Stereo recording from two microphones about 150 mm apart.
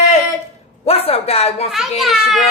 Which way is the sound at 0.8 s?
40° left (ahead or behind).